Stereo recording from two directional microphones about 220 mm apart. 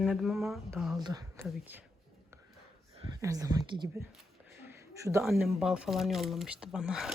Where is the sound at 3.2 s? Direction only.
15° right (ahead or behind).